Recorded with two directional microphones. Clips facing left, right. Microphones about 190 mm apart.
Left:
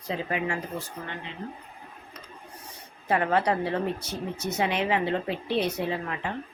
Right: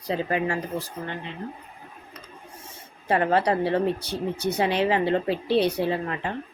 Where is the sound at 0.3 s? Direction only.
35° right (ahead or behind).